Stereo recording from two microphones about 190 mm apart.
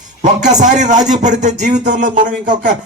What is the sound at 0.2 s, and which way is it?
A man's voice, 40° right (ahead or behind).